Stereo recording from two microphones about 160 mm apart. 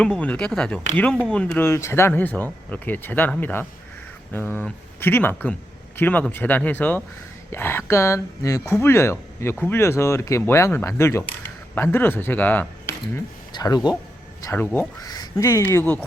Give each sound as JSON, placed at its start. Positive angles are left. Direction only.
{"t": 0.0, "sound": "speech", "side_deg": 10}
{"t": 13.1, "sound": "speech", "side_deg": 25}
{"t": 14.4, "sound": "speech", "side_deg": 15}
{"t": 15.0, "sound": "speech", "side_deg": 25}